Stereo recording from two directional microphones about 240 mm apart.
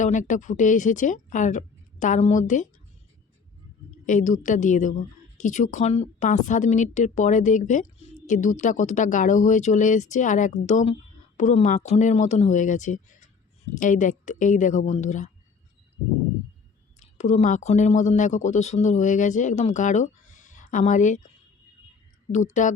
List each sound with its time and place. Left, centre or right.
0.0 s a woman's voice: left
4.0 s a woman's voice: left
17.0 s a woman's voice: left
22.3 s a woman's voice: left